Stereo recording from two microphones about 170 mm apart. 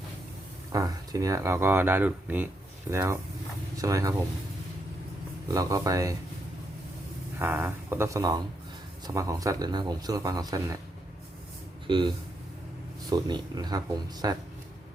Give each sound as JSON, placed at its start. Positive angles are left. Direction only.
{"t": 0.7, "sound": "speech", "side_deg": -20}
{"t": 5.5, "sound": "speech", "side_deg": -20}
{"t": 7.3, "sound": "speech", "side_deg": -10}
{"t": 11.9, "sound": "speech", "side_deg": -30}